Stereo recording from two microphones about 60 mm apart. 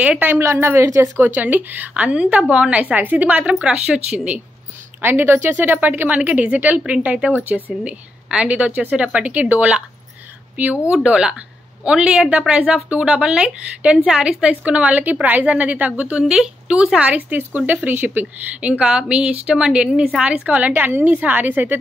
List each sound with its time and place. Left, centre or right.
0.4 s a woman's voice: right
1.2 s speech: right
3.6 s speech: centre
5.0 s a woman's voice: right; by 9.8 s centre
10.9 s speech: centre; by 21.7 s right